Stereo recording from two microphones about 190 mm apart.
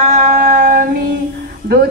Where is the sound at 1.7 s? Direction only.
55° right (ahead or behind).